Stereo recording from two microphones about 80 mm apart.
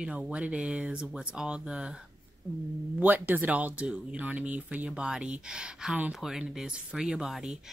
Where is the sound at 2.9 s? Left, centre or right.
Right.